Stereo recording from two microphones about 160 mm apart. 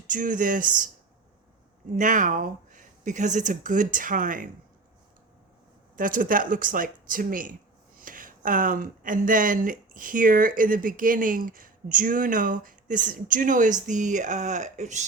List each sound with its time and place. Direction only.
0.1 s speech: 55° right (ahead or behind)
2.0 s speech: 55° right (ahead or behind)
6.0 s speech: 60° right (ahead or behind)